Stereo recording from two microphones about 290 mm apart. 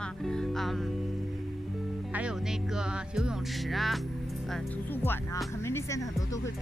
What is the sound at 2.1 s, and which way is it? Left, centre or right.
Speech, centre.